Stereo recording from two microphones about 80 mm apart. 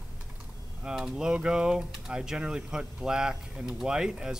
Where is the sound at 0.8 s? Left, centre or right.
Centre.